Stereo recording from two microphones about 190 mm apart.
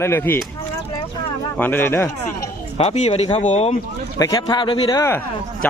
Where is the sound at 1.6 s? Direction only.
10° left (ahead or behind).